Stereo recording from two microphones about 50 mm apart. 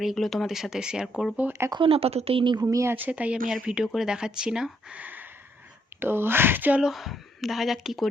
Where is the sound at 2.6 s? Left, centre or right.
Right.